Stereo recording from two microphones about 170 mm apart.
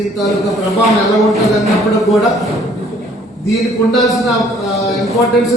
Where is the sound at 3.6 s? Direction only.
Centre (ahead or behind).